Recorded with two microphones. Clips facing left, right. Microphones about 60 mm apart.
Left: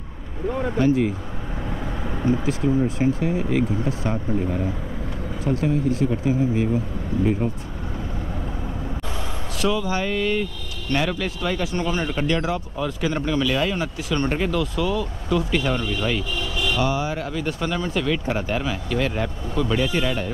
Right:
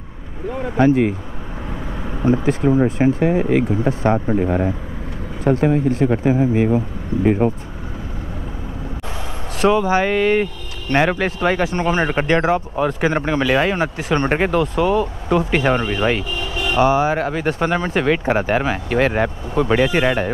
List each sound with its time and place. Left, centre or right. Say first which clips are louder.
2.4 s speech: right 5 dB; right
9.6 s speech: right 8 dB; right